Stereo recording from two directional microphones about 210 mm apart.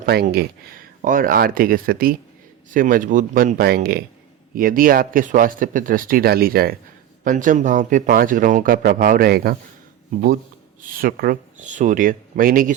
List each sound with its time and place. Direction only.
0.0 s speech: 50° right (ahead or behind)
10.8 s speech: 45° right (ahead or behind)